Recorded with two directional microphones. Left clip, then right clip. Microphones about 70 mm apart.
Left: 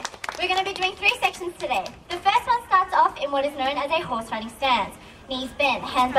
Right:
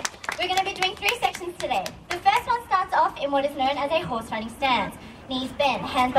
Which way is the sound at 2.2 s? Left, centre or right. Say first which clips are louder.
Left 1 dB; left.